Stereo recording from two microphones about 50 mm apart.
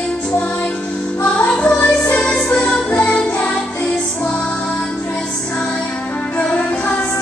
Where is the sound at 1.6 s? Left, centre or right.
Left.